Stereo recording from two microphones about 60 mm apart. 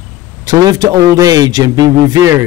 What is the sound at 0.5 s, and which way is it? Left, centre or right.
A man's voice, right.